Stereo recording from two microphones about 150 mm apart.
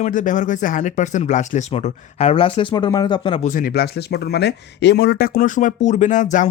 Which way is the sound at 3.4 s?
65° left (ahead or behind).